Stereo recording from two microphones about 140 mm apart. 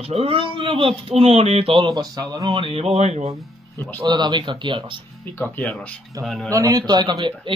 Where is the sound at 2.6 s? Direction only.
45° right (ahead or behind).